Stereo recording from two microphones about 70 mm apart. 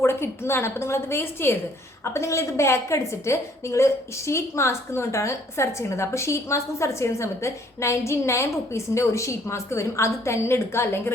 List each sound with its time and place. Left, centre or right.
0.0 s a woman's voice: left